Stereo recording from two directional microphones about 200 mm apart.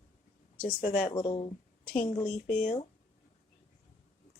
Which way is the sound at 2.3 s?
40° left (ahead or behind).